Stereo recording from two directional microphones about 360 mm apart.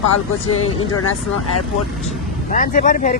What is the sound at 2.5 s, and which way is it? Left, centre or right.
Speech, left.